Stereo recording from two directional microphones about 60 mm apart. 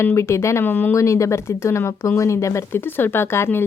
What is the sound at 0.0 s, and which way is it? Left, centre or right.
Speech, left.